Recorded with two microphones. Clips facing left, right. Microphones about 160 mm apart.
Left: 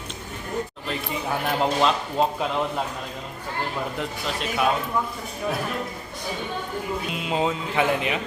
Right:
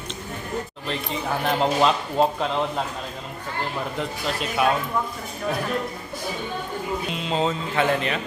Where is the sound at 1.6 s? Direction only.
Centre (ahead or behind).